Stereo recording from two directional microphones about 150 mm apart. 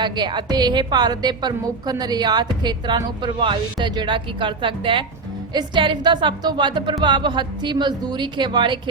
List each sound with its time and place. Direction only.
0.0 s a woman's voice: 30° right (ahead or behind)